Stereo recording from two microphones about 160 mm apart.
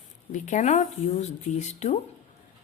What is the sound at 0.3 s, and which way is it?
A woman's voice, 50° left (ahead or behind).